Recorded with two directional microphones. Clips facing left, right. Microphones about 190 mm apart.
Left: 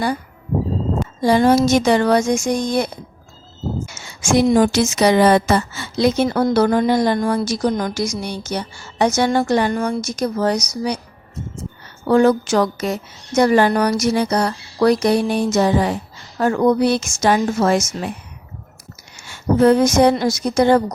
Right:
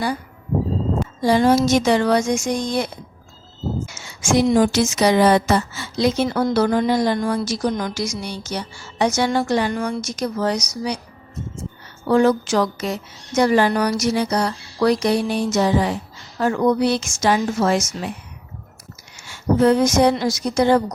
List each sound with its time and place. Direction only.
1.2 s a woman's voice: 55° left (ahead or behind)
12.0 s a woman's voice: 50° left (ahead or behind)
19.3 s a woman's voice: 55° left (ahead or behind)